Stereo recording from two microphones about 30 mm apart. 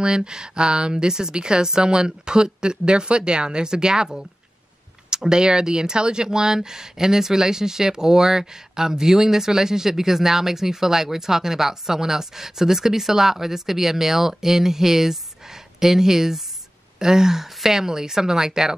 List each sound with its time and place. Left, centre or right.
0.0 s a woman's voice: right
5.1 s a woman's voice: right